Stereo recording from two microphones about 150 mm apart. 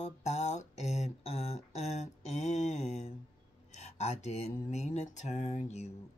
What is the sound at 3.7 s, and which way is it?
Mantra, 50° left (ahead or behind).